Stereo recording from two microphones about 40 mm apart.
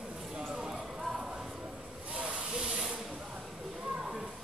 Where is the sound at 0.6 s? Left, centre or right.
Centre.